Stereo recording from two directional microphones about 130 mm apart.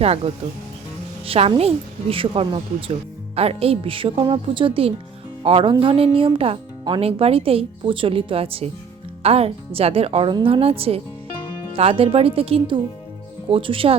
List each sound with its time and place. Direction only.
1.2 s speech: 45° right (ahead or behind)